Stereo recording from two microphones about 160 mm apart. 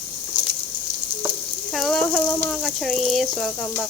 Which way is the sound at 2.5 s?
Centre (ahead or behind).